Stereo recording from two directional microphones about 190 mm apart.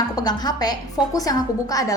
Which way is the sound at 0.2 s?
20° left (ahead or behind).